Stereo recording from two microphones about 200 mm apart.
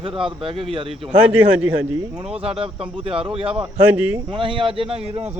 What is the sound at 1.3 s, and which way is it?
Speech, 5° right (ahead or behind).